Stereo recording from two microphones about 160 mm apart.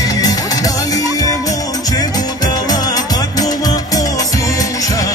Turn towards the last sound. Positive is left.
turn(degrees=25)  # may be behind; listen again after turning